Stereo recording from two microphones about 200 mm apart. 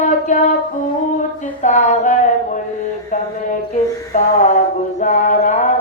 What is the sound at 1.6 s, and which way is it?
Female singing, 35° left (ahead or behind).